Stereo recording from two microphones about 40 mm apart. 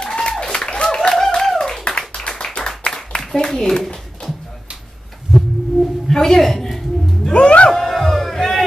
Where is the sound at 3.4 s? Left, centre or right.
Centre.